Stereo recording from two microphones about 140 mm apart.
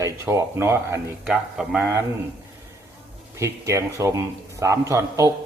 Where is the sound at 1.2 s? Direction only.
5° right (ahead or behind).